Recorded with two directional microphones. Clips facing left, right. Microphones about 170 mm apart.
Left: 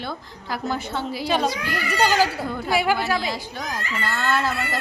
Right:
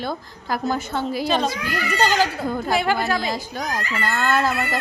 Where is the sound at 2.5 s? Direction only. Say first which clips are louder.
Right 4 dB; 45° right (ahead or behind).